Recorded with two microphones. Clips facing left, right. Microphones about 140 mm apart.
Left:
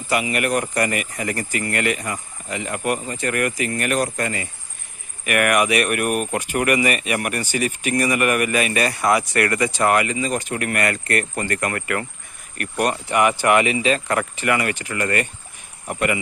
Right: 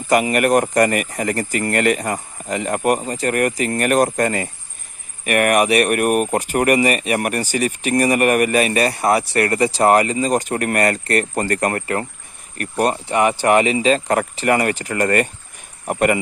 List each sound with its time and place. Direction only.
0.1 s speech: 45° right (ahead or behind)